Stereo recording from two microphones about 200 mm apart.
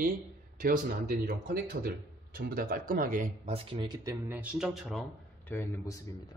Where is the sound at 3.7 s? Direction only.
25° right (ahead or behind).